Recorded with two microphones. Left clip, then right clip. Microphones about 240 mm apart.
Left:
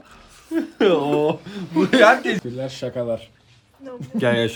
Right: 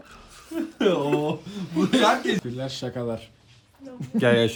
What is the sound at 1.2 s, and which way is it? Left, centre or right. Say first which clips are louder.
Speech: left 6 dB; centre.